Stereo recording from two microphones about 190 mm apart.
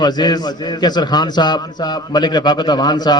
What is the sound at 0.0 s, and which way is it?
A man's voice, 20° left (ahead or behind).